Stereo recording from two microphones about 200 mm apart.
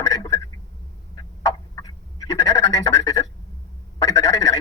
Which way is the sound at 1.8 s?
20° left (ahead or behind).